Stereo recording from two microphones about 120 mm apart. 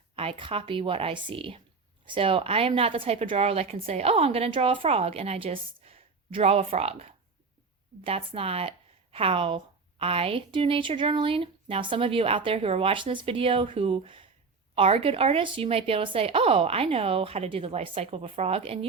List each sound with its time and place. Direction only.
0.2 s a woman's voice: 50° right (ahead or behind)